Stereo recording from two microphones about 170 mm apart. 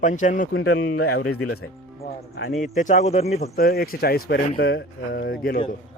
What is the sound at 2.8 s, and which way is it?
Speech, 45° left (ahead or behind).